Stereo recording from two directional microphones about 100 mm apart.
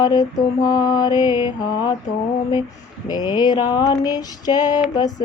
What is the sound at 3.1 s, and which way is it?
Mantra, 45° left (ahead or behind).